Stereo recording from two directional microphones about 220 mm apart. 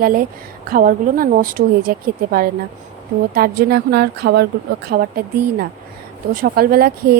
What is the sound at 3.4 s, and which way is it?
Speech, 45° right (ahead or behind).